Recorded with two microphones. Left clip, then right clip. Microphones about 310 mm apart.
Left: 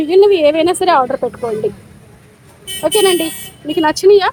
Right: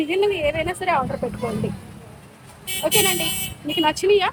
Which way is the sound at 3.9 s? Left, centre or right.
Centre.